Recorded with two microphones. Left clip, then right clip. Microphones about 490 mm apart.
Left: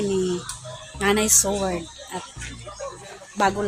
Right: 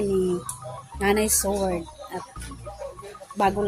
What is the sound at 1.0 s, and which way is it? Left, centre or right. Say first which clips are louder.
Speech: left 2 dB; right.